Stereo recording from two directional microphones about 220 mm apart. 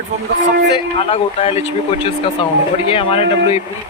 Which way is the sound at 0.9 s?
25° left (ahead or behind).